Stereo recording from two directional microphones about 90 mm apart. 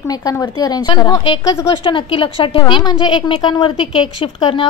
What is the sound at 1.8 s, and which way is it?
A woman's voice, 70° left (ahead or behind).